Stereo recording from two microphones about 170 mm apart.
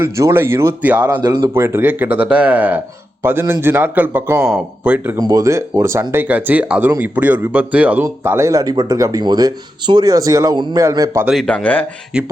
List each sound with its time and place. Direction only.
0.0 s speech: 15° right (ahead or behind)
1.0 s speech: 20° right (ahead or behind)
5.1 s speech: 20° right (ahead or behind)
11.3 s speech: 5° left (ahead or behind)
12.1 s speech: 5° right (ahead or behind)